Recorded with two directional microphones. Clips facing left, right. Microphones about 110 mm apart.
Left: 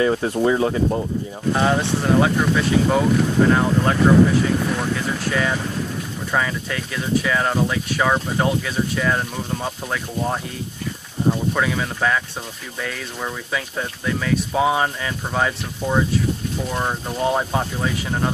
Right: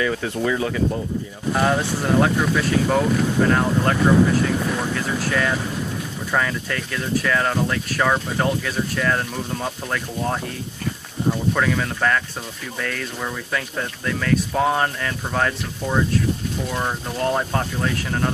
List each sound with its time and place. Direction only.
0.0 s speech: 35° left (ahead or behind)
1.5 s speech: centre (ahead or behind)
11.5 s speech: 5° left (ahead or behind)